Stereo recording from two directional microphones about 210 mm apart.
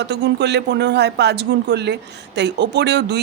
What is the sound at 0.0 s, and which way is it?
A man's voice, 55° right (ahead or behind).